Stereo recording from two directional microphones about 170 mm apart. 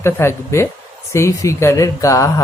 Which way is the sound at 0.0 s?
15° left (ahead or behind).